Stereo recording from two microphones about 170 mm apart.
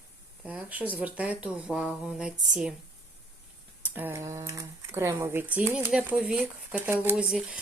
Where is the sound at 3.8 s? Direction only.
10° right (ahead or behind).